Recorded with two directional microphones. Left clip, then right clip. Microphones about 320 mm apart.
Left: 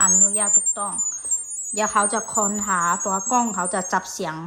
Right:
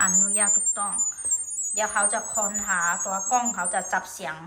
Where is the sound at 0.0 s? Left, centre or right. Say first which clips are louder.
Left 3 dB; centre.